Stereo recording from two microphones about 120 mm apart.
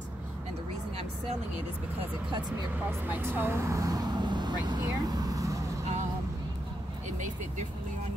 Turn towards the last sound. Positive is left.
turn(degrees=-90)